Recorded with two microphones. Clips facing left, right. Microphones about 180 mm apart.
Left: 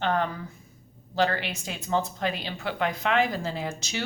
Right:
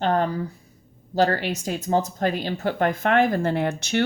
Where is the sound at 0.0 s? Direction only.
40° right (ahead or behind).